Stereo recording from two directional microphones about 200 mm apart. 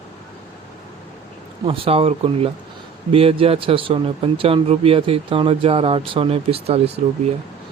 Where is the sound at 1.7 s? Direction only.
25° right (ahead or behind).